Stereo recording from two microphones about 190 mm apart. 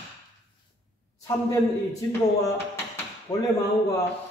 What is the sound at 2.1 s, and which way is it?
A man's voice, 10° left (ahead or behind).